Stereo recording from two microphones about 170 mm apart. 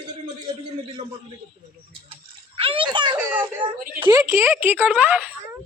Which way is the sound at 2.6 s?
30° right (ahead or behind).